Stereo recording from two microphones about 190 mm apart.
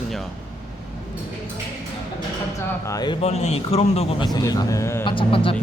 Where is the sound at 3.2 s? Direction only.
35° left (ahead or behind).